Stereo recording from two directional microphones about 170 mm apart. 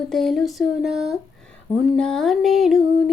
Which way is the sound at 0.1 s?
Centre (ahead or behind).